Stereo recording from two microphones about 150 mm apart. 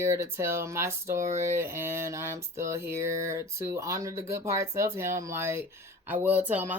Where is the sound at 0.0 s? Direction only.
20° right (ahead or behind).